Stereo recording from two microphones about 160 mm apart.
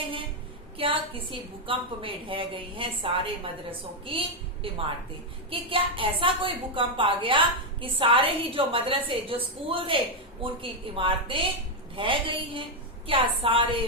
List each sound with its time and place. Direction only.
0.8 s a woman's voice: 35° right (ahead or behind)